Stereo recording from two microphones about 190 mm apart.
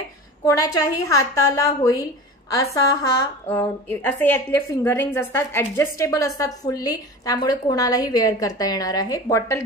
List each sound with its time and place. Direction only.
0.5 s a woman's voice: 15° left (ahead or behind)